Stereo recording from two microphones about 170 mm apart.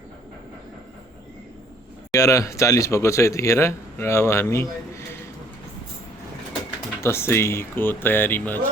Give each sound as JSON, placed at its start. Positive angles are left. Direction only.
{"t": 2.1, "sound": "speech", "side_deg": 20}
{"t": 7.0, "sound": "speech", "side_deg": 15}